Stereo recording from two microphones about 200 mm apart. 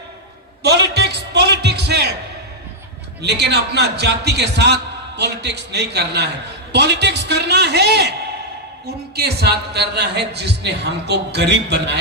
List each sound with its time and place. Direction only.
0.6 s a sound: 55° right (ahead or behind)
3.2 s a man's voice: 60° right (ahead or behind)
9.1 s a man's voice: 55° right (ahead or behind)